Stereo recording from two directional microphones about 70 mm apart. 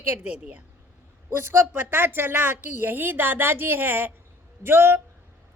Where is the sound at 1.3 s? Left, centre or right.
Right.